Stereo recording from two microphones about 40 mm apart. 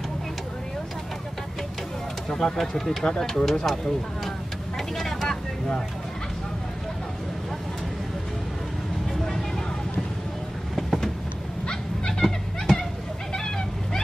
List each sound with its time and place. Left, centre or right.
2.2 s speech: centre
3.4 s speech: centre
4.7 s vehicle: centre
10.8 s vehicle: centre
11.6 s a sound: left
12.1 s a sound: centre